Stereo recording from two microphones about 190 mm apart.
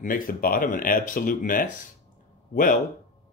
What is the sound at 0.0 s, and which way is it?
Speech, 50° left (ahead or behind).